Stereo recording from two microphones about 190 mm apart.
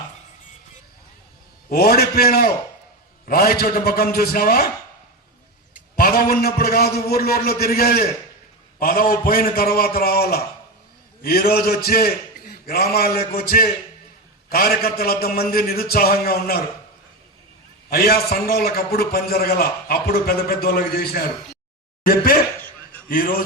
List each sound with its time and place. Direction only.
1.7 s a man's voice: 55° left (ahead or behind)
6.0 s a man's voice: 50° left (ahead or behind)
17.8 s a man's voice: 55° left (ahead or behind)